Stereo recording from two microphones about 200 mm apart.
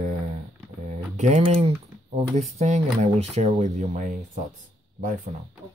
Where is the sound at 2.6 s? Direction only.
35° right (ahead or behind).